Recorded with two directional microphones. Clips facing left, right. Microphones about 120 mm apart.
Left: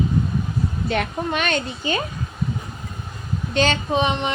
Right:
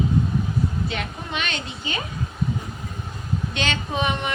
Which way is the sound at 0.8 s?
50° left (ahead or behind).